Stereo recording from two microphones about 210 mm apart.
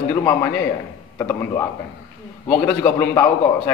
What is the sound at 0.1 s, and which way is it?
A man's voice, 10° left (ahead or behind).